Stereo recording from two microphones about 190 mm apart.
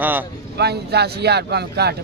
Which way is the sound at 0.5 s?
60° right (ahead or behind).